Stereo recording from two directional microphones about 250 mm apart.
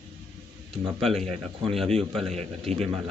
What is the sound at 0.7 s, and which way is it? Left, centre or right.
Speech, centre.